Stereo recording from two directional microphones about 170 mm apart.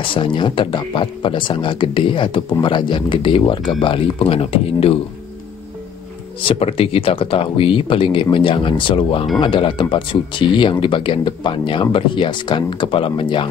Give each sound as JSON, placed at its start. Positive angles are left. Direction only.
{"t": 0.0, "sound": "speech", "side_deg": 30}
{"t": 6.4, "sound": "speech", "side_deg": 35}